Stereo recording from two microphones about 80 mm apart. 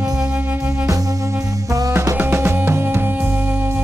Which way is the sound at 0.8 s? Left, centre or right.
Right.